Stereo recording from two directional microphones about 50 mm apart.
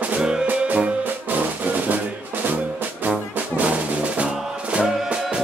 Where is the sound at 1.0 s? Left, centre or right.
Right.